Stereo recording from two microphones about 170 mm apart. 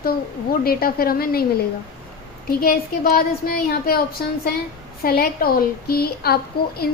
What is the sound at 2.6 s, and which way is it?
Speech, 60° left (ahead or behind).